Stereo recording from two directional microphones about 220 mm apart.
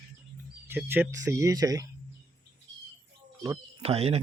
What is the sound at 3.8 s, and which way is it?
Speech, 30° right (ahead or behind).